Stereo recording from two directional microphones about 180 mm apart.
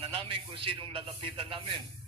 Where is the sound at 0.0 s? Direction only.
30° right (ahead or behind).